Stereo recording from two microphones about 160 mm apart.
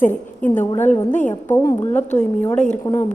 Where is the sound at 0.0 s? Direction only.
10° left (ahead or behind).